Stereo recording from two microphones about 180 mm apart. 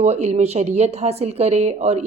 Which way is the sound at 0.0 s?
40° right (ahead or behind).